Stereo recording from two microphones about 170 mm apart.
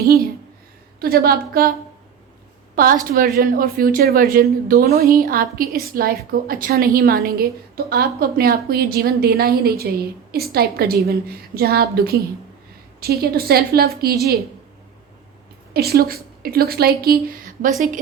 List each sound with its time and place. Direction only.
1.0 s a woman's voice: 60° right (ahead or behind)
2.7 s a woman's voice: 55° right (ahead or behind)
15.7 s a woman's voice: 65° right (ahead or behind)